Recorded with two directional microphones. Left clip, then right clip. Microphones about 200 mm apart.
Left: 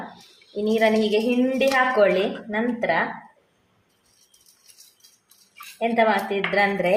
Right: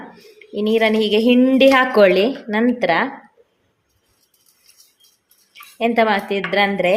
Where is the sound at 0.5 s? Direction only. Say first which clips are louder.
Right 4 dB; 40° right (ahead or behind).